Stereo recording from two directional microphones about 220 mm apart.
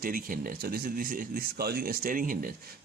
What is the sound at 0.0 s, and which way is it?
Speech, 40° right (ahead or behind).